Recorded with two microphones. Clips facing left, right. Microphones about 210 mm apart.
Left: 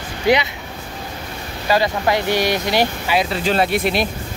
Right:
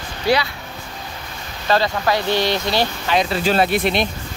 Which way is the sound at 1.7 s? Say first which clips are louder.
Left 1 dB; 20° left (ahead or behind).